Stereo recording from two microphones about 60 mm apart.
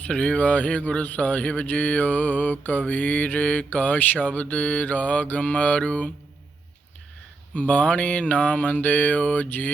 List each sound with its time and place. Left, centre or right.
0.1 s speech: left
7.5 s speech: left